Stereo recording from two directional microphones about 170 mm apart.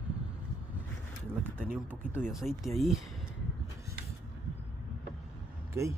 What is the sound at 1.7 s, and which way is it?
Speech, 10° right (ahead or behind).